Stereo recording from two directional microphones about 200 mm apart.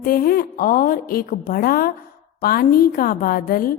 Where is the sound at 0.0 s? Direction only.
45° left (ahead or behind).